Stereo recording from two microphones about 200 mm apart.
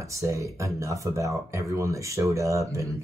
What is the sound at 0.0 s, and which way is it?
Speech, 15° right (ahead or behind).